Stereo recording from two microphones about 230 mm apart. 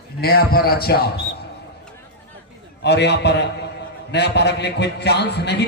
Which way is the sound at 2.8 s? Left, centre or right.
Left.